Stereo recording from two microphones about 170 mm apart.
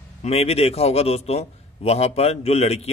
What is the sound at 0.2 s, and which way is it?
A man's voice, 35° left (ahead or behind).